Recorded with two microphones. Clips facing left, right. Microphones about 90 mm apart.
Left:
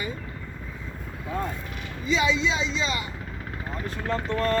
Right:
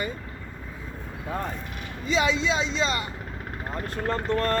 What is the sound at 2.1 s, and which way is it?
Speech, 40° right (ahead or behind).